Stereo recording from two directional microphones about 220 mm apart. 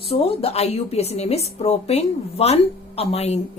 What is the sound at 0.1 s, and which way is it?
A woman's voice, 25° left (ahead or behind).